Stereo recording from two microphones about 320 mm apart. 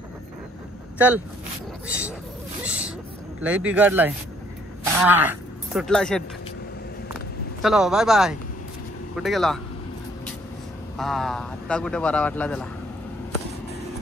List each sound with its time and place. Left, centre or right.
0.9 s a man's voice: centre
3.4 s a man's voice: centre
7.6 s a man's voice: centre
11.0 s a man's voice: centre